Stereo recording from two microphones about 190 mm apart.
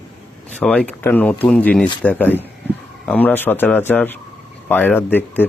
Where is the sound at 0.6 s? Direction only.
5° left (ahead or behind).